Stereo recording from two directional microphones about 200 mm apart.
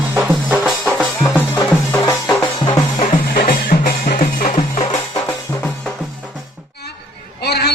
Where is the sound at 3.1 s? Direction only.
45° left (ahead or behind).